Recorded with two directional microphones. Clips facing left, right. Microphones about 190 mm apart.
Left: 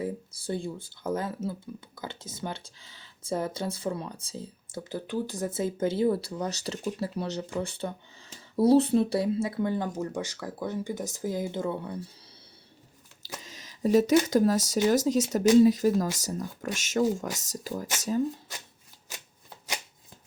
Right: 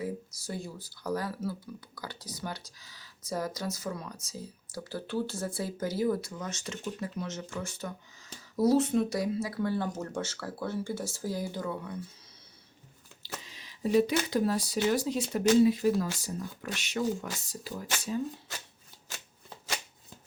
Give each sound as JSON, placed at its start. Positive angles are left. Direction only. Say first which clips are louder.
{"t": 0.0, "sound": "speech", "louder": "left 3 dB", "side_deg": 30}
{"t": 13.4, "sound": "speech", "louder": "left 5 dB", "side_deg": 45}